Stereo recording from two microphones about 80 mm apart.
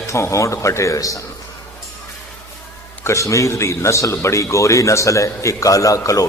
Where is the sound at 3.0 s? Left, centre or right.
Left.